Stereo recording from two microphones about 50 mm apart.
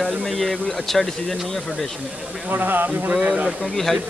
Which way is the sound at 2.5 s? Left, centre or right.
Right.